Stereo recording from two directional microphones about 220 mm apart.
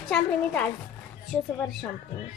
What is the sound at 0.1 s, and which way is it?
A woman's voice, 5° left (ahead or behind).